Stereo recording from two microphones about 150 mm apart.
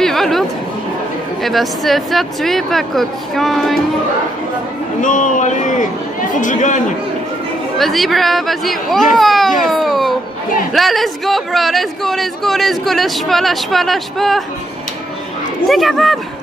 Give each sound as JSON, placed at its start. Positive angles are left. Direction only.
{"t": 0.0, "sound": "a sound", "side_deg": 0}
{"t": 1.4, "sound": "speech", "side_deg": 0}
{"t": 5.0, "sound": "a man's voice", "side_deg": 60}
{"t": 7.7, "sound": "speech", "side_deg": 0}
{"t": 15.7, "sound": "speech", "side_deg": 0}